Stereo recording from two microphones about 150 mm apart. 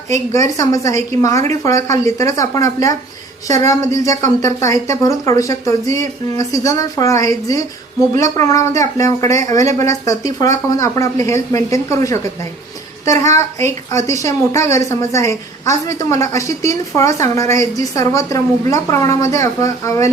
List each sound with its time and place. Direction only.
0.3 s a woman's voice: 20° left (ahead or behind)
3.9 s a woman's voice: 20° left (ahead or behind)
13.2 s a woman's voice: 50° right (ahead or behind)
13.9 s a woman's voice: 20° left (ahead or behind)